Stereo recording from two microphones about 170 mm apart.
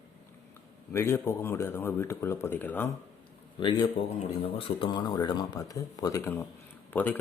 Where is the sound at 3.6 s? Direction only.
25° left (ahead or behind).